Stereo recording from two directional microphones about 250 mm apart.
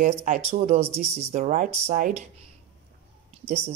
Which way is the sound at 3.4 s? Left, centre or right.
Right.